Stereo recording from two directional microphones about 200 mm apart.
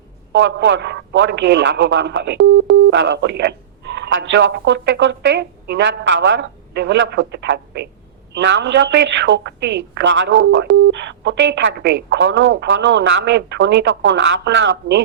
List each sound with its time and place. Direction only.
0.3 s a man's voice: 65° right (ahead or behind)